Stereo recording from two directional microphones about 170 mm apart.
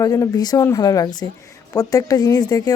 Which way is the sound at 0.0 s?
20° left (ahead or behind).